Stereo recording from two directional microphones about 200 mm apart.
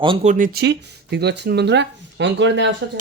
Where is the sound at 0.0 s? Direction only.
25° right (ahead or behind).